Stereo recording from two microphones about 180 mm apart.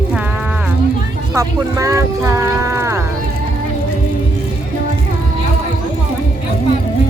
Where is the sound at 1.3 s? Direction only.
20° right (ahead or behind).